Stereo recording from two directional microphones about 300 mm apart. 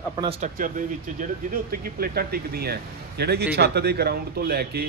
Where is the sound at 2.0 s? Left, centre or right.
Right.